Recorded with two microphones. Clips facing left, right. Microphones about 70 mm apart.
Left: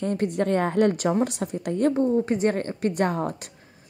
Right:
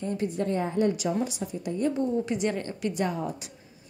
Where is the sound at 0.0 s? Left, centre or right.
Left.